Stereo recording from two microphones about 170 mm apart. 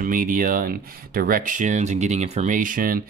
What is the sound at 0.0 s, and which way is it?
Speech, 55° right (ahead or behind).